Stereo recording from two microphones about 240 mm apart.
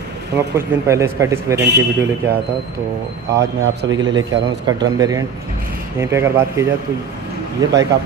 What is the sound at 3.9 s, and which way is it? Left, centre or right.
Speech, centre.